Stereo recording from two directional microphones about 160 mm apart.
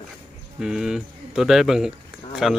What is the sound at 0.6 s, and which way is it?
Speech, 5° right (ahead or behind).